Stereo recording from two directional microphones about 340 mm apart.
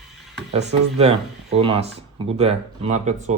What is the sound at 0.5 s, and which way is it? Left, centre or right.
Speech, centre.